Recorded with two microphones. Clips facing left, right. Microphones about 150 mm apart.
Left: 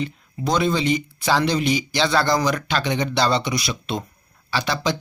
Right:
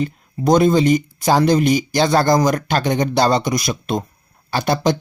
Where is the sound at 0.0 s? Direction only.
45° right (ahead or behind).